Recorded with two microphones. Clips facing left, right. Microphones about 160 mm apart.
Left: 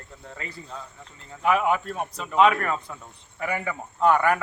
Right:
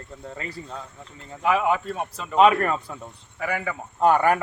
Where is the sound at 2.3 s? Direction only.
35° right (ahead or behind).